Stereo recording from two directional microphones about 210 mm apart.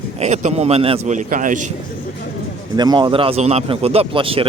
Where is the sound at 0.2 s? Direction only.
30° right (ahead or behind).